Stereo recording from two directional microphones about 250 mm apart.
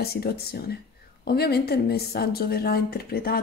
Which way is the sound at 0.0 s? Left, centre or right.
Left.